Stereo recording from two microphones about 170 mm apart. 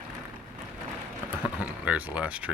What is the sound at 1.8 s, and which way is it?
Speech, 10° right (ahead or behind).